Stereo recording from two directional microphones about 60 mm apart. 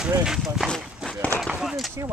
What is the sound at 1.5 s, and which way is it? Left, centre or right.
Speech, centre.